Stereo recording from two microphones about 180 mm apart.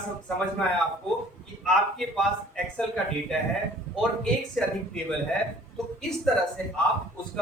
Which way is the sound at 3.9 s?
5° left (ahead or behind).